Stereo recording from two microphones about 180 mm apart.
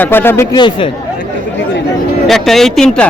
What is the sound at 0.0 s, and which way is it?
Speech, 10° left (ahead or behind).